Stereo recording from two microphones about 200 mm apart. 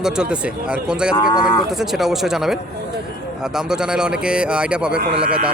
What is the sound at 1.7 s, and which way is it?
Speech, centre (ahead or behind).